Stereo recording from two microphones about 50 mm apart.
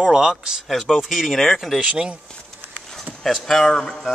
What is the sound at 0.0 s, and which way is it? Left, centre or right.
Speech, centre.